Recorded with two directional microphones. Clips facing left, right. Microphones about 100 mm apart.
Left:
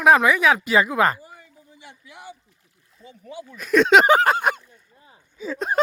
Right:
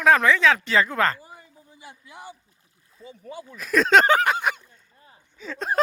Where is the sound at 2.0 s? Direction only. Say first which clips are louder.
Even; 35° right (ahead or behind).